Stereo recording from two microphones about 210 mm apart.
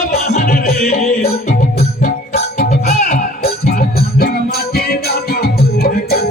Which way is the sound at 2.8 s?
45° left (ahead or behind).